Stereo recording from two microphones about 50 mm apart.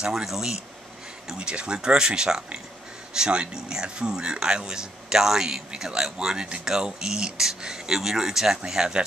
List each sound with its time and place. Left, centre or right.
0.0 s speech: centre
1.3 s speech: centre